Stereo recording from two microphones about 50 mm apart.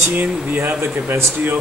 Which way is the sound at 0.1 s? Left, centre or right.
Right.